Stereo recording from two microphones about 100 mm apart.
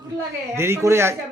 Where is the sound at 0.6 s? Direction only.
25° right (ahead or behind).